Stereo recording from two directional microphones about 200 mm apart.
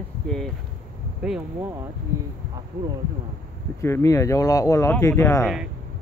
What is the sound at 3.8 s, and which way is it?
Speech, 15° left (ahead or behind).